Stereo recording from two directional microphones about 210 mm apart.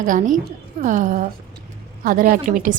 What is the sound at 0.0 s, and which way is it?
A woman's voice, 40° right (ahead or behind).